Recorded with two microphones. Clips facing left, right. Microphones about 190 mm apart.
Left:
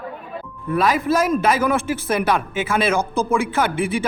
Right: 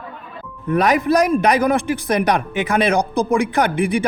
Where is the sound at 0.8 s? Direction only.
20° right (ahead or behind).